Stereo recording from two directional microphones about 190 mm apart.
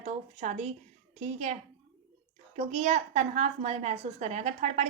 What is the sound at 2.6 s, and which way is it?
A woman's voice, 35° right (ahead or behind).